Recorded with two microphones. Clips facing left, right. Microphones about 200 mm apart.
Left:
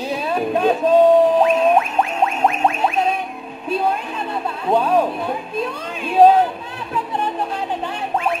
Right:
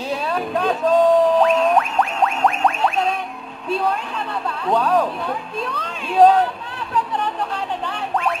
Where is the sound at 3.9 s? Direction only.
15° left (ahead or behind).